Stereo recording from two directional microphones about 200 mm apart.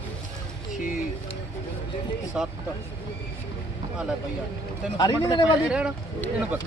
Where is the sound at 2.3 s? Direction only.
5° right (ahead or behind).